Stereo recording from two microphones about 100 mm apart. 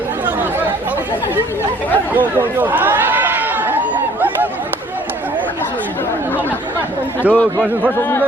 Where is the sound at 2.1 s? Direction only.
20° right (ahead or behind).